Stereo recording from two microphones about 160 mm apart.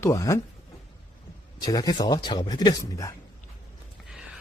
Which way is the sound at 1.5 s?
25° left (ahead or behind).